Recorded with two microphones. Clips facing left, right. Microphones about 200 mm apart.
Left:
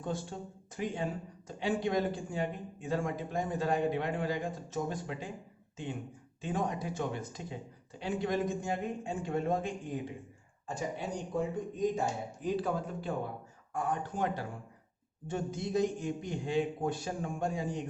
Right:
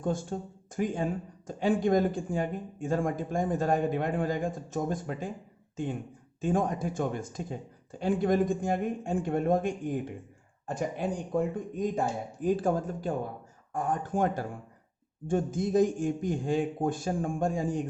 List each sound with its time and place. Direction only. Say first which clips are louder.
0.0 s speech: right 6 dB; 45° right (ahead or behind)